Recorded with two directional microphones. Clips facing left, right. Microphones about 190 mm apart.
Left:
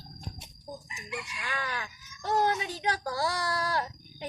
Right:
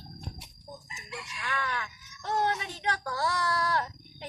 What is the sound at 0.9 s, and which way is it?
Chicken, 15° left (ahead or behind).